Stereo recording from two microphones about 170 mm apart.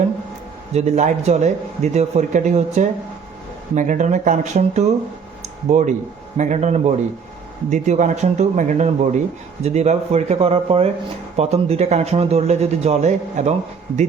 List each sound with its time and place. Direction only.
0.7 s speech: 40° right (ahead or behind)
5.4 s a sound: 45° right (ahead or behind)
6.3 s speech: 45° right (ahead or behind)